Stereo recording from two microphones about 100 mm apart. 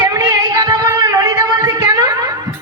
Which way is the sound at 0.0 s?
45° right (ahead or behind).